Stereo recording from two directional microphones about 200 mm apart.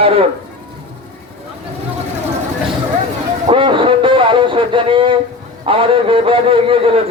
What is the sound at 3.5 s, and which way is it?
A man's voice, 25° right (ahead or behind).